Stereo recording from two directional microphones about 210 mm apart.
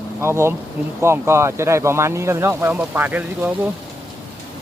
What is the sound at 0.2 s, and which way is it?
Speech, 10° right (ahead or behind).